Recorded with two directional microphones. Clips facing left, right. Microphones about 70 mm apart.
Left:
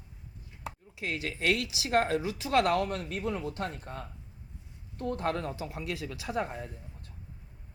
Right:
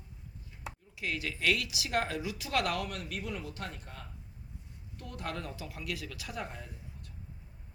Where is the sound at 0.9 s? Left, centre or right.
Left.